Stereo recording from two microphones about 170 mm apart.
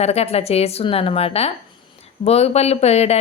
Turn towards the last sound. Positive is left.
turn(degrees=40)  # may be behind; listen again after turning